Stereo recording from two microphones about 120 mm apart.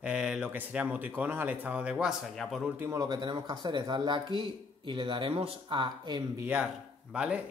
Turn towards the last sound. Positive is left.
turn(degrees=-10)  # may be behind; listen again after turning